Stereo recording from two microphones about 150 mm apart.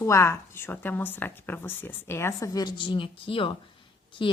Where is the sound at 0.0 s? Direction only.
20° left (ahead or behind).